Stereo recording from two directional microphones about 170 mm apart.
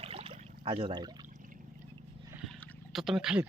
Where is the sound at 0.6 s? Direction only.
30° right (ahead or behind).